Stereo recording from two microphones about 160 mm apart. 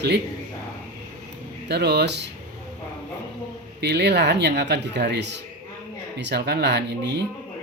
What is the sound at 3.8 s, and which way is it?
A man's voice, 90° right.